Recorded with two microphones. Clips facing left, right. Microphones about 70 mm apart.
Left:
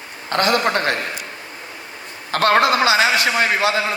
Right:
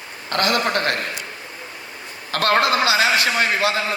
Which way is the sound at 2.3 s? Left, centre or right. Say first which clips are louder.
Left 3 dB; left.